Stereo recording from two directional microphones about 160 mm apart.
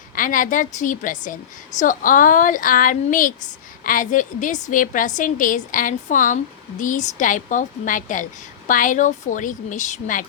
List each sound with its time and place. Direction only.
0.2 s a woman's voice: 55° left (ahead or behind)